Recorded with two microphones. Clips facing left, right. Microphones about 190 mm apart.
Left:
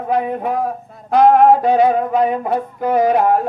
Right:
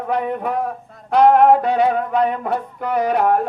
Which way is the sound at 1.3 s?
65° right (ahead or behind).